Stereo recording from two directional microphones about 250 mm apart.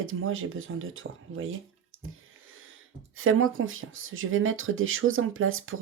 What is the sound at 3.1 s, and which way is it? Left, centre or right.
Speech, right.